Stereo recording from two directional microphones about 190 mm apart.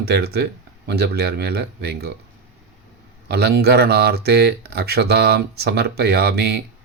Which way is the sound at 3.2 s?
60° right (ahead or behind).